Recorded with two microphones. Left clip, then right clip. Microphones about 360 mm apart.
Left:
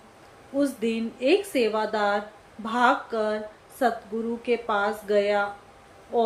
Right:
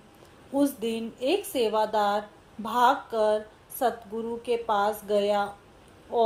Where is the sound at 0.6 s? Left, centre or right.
Centre.